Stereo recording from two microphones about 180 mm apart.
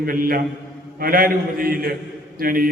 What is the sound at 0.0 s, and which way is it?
A man's voice, 55° right (ahead or behind).